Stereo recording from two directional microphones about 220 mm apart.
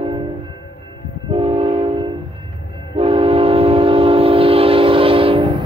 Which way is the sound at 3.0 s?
25° right (ahead or behind).